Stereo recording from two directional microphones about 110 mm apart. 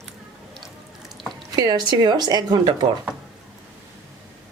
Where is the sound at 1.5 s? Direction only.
40° right (ahead or behind).